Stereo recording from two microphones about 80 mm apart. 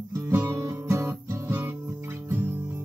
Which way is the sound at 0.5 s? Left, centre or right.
Right.